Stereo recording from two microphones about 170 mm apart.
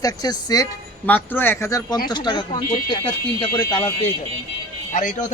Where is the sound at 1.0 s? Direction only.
10° left (ahead or behind); by 3.8 s 30° left (ahead or behind).